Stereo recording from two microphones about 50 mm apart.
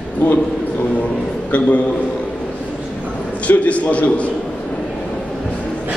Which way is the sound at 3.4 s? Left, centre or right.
Left.